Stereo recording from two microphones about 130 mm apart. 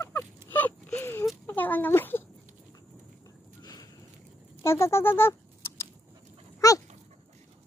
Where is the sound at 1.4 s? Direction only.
15° left (ahead or behind).